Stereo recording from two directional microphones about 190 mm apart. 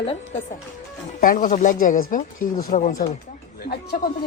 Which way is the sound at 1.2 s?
45° left (ahead or behind).